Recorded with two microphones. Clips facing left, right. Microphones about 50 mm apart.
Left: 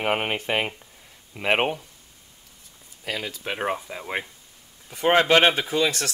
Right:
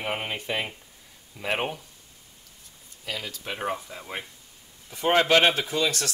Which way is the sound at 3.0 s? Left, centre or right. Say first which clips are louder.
Left 4 dB; left.